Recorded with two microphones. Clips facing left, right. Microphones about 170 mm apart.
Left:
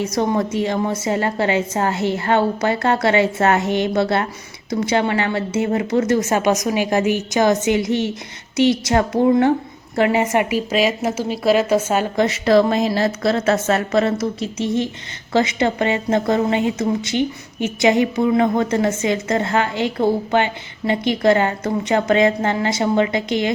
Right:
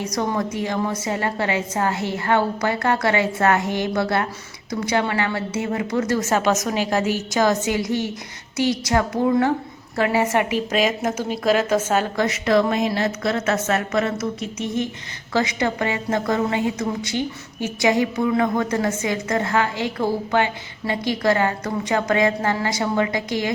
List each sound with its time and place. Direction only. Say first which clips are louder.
0.0 s a woman's voice: left 4 dB; 25° left (ahead or behind); by 12.2 s 10° left (ahead or behind)
12.2 s a woman's voice: left 6 dB; 30° left (ahead or behind)